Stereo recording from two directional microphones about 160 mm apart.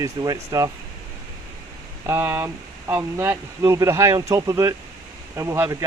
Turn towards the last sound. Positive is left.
turn(degrees=-15)  # may be behind; listen again after turning